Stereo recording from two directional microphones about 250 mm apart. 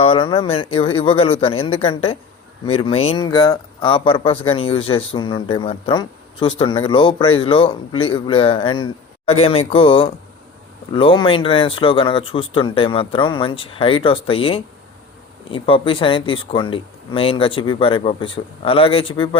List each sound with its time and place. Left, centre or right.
0.0 s speech: left